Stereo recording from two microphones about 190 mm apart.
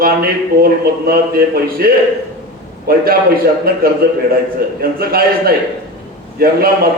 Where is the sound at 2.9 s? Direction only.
50° right (ahead or behind).